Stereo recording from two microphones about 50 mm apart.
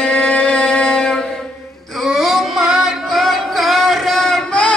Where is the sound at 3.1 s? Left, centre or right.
Centre.